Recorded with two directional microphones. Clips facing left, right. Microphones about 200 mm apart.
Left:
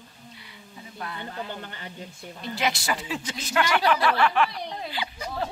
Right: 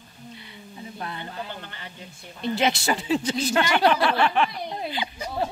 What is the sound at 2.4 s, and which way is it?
Speech, 25° right (ahead or behind).